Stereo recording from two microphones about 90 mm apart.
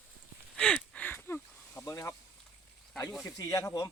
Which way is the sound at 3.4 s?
40° left (ahead or behind).